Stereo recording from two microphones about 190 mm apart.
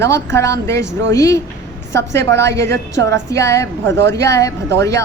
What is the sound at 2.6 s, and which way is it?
Speech, 70° right (ahead or behind).